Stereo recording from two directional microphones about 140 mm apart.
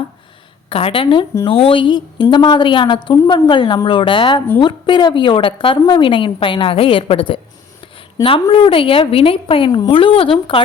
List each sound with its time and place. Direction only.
0.7 s a woman's voice: 45° left (ahead or behind)